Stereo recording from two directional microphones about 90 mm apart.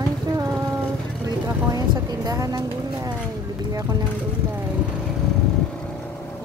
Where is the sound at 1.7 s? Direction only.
40° right (ahead or behind).